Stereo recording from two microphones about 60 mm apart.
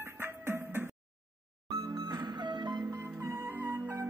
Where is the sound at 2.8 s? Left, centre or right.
Right.